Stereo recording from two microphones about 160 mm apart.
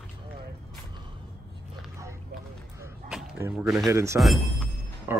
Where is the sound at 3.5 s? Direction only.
5° right (ahead or behind).